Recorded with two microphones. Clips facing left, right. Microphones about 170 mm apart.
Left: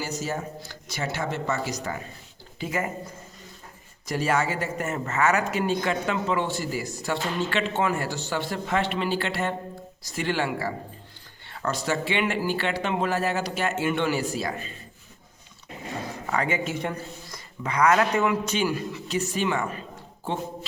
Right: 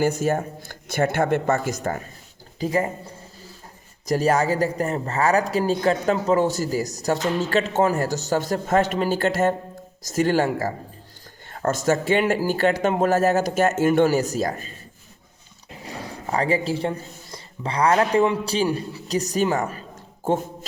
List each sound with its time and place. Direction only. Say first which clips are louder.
0.0 s speech: right 9 dB; 55° right (ahead or behind)
2.6 s speech: right 6 dB; 35° right (ahead or behind)
16.2 s speech: right 5 dB; 35° right (ahead or behind)